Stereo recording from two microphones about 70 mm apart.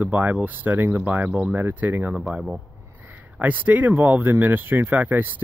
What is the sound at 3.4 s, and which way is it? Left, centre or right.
Speech, right.